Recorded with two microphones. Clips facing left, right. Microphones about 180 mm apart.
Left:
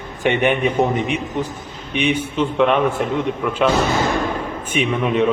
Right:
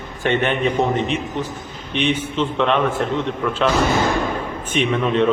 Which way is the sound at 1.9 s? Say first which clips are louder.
Left 1 dB; 10° left (ahead or behind).